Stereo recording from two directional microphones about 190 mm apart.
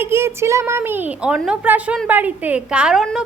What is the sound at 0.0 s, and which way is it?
A woman's voice, 15° right (ahead or behind).